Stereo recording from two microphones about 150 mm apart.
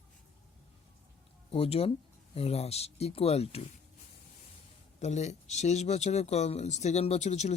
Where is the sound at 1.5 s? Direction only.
40° left (ahead or behind).